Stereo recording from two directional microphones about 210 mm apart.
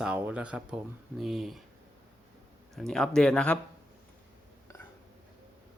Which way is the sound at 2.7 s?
5° left (ahead or behind).